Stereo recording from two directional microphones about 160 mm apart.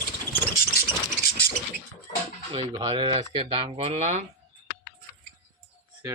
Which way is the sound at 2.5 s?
30° right (ahead or behind).